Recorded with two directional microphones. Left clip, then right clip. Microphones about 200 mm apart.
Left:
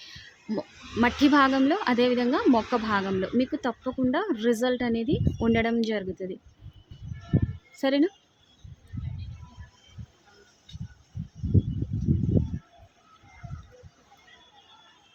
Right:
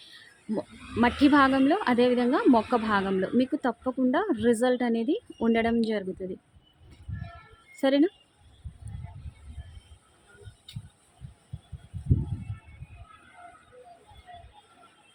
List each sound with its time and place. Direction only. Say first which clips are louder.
0.0 s speech: left 3 dB; centre (ahead or behind)
7.8 s speech: right 1 dB; 5° right (ahead or behind)